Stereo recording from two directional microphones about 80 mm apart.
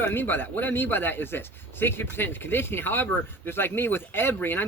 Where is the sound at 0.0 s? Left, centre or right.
Left.